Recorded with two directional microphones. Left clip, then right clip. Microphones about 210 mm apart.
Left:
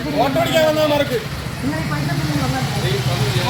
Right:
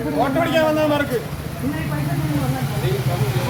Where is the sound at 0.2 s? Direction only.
35° left (ahead or behind).